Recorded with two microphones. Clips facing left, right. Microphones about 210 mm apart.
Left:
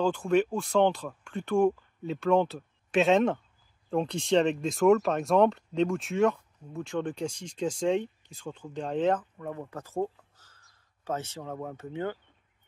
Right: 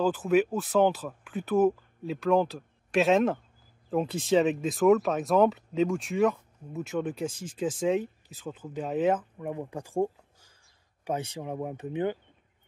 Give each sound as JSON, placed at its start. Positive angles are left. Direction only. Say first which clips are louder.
{"t": 0.0, "sound": "speech", "louder": "right 1 dB", "side_deg": -5}